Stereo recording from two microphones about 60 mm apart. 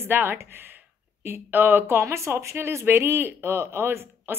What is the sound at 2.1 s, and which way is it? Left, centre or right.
Speech, right.